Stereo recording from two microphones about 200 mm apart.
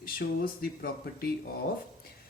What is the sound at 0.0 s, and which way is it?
Speech, 50° left (ahead or behind).